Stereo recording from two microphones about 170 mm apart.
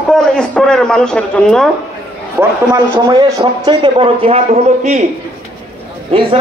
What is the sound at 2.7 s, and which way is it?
Speech, 20° right (ahead or behind).